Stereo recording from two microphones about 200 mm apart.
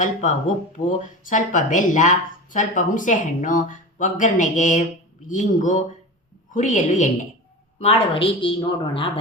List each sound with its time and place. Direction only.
0.0 s a woman's voice: 35° left (ahead or behind)